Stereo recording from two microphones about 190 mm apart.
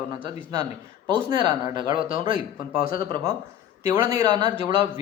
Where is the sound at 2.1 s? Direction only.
45° left (ahead or behind).